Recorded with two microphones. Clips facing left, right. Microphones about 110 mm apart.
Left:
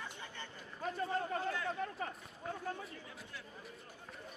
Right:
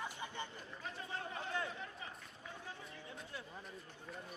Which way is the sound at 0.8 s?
50° left (ahead or behind).